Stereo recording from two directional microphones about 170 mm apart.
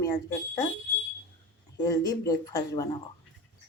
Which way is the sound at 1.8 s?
20° left (ahead or behind).